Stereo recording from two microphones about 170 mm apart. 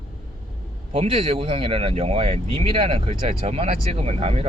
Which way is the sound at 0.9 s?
30° right (ahead or behind).